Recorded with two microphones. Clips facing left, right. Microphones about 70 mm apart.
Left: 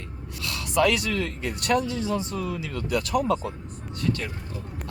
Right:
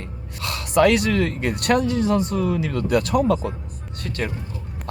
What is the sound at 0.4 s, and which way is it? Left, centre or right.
Speech, right.